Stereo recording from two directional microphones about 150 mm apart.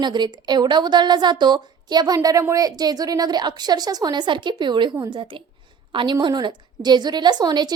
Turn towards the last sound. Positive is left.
turn(degrees=-30)  # may be behind; listen again after turning